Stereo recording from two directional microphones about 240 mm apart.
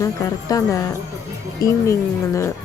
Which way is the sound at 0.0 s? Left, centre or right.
Centre.